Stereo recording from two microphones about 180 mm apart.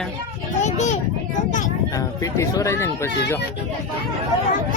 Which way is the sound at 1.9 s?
20° left (ahead or behind).